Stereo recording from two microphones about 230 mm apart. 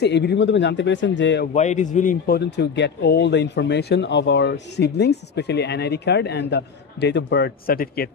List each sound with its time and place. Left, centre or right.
0.0 s speech: left
1.5 s speech: left